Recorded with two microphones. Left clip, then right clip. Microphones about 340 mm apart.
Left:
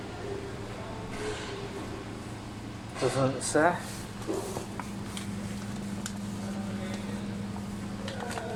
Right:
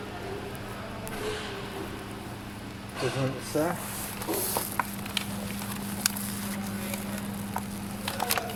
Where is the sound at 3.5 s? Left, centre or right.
Left.